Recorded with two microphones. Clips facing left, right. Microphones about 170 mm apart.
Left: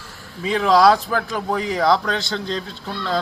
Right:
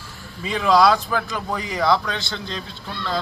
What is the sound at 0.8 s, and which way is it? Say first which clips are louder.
A man's voice: left 3 dB; 35° left (ahead or behind).